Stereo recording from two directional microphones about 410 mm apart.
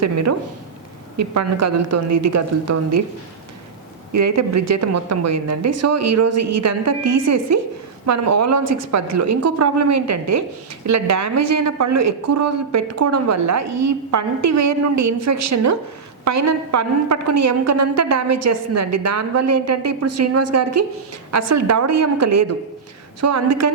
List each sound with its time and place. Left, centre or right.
0.0 s a man's voice: right
4.1 s a man's voice: right